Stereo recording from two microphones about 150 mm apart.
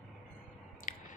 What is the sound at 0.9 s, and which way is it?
Biting, 60° left (ahead or behind).